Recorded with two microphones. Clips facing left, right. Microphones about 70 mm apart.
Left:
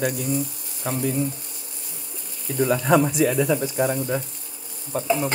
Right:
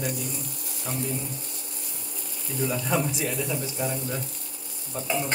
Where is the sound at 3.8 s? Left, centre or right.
Left.